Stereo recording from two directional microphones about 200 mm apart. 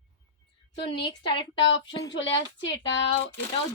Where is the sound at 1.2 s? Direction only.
25° left (ahead or behind).